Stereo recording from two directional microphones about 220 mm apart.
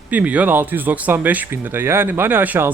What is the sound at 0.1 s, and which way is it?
Speech, 5° right (ahead or behind).